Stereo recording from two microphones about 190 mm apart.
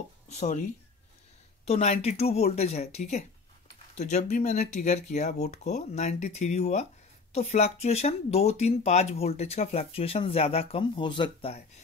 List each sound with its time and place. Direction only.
0.3 s speech: 40° left (ahead or behind)
1.7 s speech: 35° left (ahead or behind)